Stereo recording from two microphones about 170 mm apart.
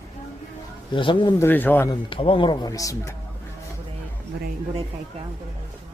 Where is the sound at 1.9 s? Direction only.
30° left (ahead or behind).